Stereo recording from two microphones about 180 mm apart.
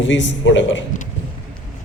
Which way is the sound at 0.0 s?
90° left.